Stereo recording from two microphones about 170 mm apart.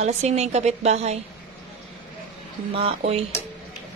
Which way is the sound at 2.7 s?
35° right (ahead or behind).